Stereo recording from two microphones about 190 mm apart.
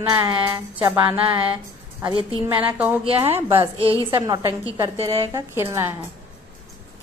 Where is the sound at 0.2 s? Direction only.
15° right (ahead or behind).